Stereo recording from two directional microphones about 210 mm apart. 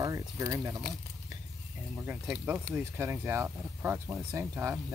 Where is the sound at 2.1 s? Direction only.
5° right (ahead or behind).